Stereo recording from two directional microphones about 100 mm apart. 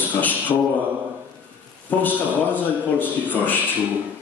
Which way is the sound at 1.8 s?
20° left (ahead or behind).